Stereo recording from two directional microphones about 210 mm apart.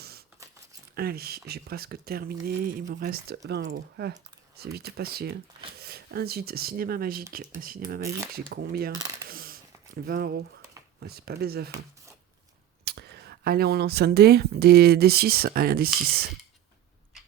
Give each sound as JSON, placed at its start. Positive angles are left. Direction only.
{"t": 0.9, "sound": "speech", "side_deg": -45}
{"t": 9.0, "sound": "speech", "side_deg": -15}
{"t": 9.3, "sound": "a sound", "side_deg": -45}
{"t": 11.0, "sound": "speech", "side_deg": -50}